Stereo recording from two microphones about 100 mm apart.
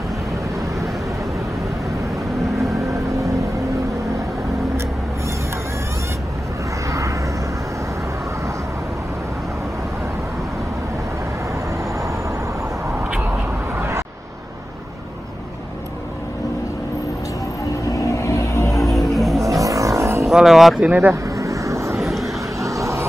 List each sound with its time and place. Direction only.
2.7 s vehicle: 30° right (ahead or behind)
6.9 s vehicle: 30° right (ahead or behind)
13.7 s vehicle: 25° right (ahead or behind)
17.8 s vehicle: 30° left (ahead or behind)
18.9 s music: centre (ahead or behind)
19.4 s vehicle: 35° right (ahead or behind)
20.2 s music: 5° right (ahead or behind)
20.8 s speech: 15° right (ahead or behind)
21.1 s vehicle: 30° right (ahead or behind)
21.9 s vehicle: centre (ahead or behind)
22.6 s vehicle: 30° right (ahead or behind)